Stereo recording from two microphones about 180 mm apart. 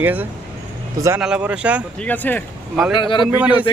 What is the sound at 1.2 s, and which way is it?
Speech, 5° right (ahead or behind).